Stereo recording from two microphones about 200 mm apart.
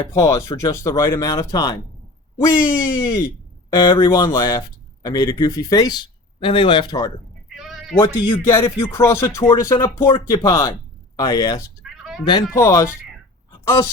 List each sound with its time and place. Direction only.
0.0 s speech: 15° left (ahead or behind)
7.4 s bleat: centre (ahead or behind)
7.9 s speech: 20° left (ahead or behind)
11.8 s a sound: centre (ahead or behind)
12.2 s speech: 20° left (ahead or behind)